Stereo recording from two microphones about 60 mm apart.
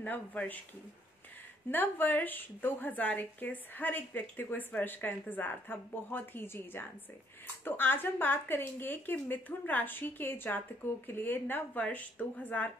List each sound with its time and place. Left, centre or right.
0.0 s speech: left
1.7 s a woman's voice: left